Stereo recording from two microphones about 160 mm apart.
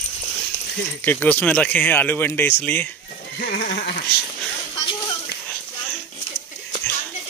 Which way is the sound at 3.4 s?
90° left.